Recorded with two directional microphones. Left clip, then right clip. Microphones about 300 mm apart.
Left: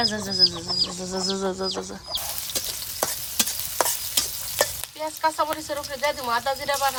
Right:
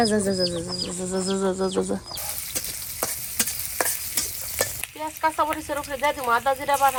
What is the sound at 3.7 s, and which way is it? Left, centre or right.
Stir, centre.